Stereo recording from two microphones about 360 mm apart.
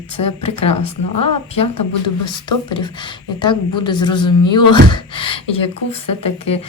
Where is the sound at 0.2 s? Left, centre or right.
Centre.